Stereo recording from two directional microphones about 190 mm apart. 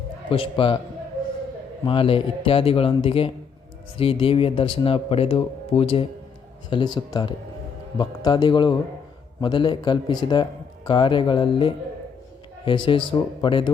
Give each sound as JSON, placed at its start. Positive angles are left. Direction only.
{"t": 0.3, "sound": "speech", "side_deg": 30}
{"t": 1.8, "sound": "speech", "side_deg": 30}